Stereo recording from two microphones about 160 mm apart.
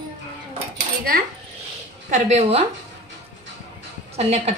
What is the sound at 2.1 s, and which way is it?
Speech, 45° right (ahead or behind).